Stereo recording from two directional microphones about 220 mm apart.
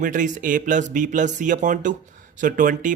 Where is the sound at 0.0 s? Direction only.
35° right (ahead or behind).